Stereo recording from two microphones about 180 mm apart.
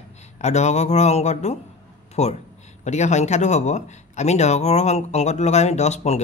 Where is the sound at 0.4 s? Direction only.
40° left (ahead or behind).